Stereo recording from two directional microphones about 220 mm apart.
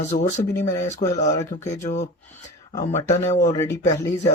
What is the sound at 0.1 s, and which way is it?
Speech, 30° left (ahead or behind).